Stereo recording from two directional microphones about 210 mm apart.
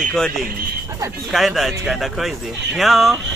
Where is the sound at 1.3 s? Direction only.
Centre (ahead or behind).